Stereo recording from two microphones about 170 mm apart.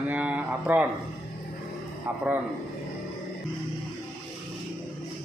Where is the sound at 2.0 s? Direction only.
10° right (ahead or behind).